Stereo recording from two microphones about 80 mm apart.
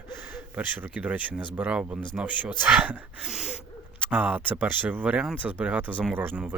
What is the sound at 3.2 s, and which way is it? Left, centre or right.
Gasp, centre.